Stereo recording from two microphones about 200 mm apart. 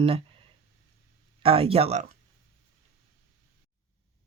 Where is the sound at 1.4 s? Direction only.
30° right (ahead or behind).